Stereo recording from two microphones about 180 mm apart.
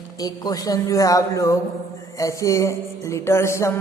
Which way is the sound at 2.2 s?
15° left (ahead or behind).